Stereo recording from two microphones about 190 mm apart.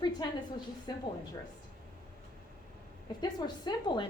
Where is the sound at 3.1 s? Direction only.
20° left (ahead or behind).